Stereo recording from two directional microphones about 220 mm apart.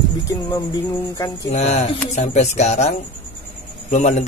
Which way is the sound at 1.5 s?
30° left (ahead or behind).